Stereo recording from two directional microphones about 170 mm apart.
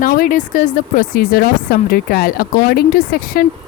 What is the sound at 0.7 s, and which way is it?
Speech, 60° left (ahead or behind).